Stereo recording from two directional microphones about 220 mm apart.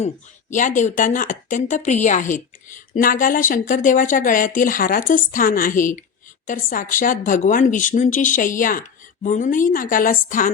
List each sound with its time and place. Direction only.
0.5 s a woman's voice: 35° left (ahead or behind)